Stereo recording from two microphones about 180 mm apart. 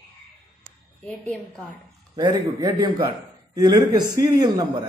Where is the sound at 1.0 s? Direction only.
5° left (ahead or behind).